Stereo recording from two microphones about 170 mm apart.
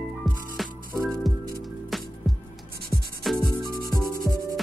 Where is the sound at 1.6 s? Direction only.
Centre (ahead or behind).